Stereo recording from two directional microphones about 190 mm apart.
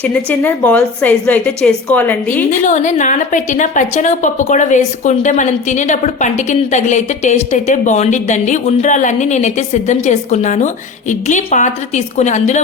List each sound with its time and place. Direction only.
0.0 s a woman's voice: 10° left (ahead or behind)
2.6 s a woman's voice: 40° left (ahead or behind)